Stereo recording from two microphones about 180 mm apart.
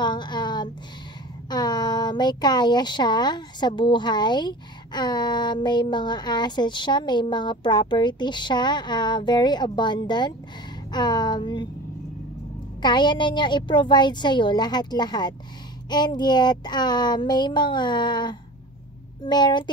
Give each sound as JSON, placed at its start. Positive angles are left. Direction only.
{"t": 0.0, "sound": "a sound", "side_deg": 25}
{"t": 1.5, "sound": "speech", "side_deg": 25}
{"t": 12.8, "sound": "speech", "side_deg": 25}